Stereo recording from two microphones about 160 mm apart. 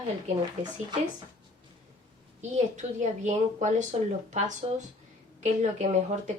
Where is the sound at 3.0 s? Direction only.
50° right (ahead or behind).